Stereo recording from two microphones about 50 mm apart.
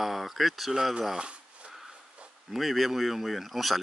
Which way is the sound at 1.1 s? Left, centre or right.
Right.